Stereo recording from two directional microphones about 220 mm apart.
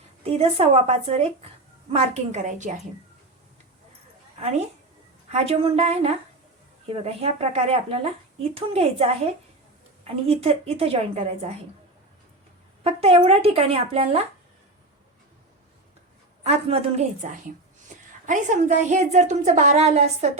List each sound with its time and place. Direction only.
0.2 s a woman's voice: 25° right (ahead or behind)
5.3 s speech: 25° right (ahead or behind)
12.8 s speech: 25° right (ahead or behind)
16.4 s a woman's voice: 30° right (ahead or behind)